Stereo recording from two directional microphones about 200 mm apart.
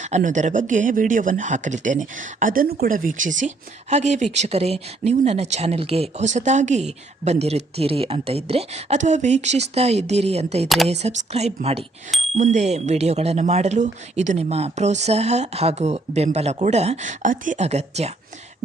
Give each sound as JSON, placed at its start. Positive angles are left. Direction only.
{"t": 0.0, "sound": "speech", "side_deg": -35}